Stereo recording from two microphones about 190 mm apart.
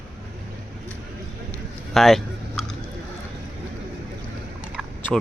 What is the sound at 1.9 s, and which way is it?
Speech, centre (ahead or behind).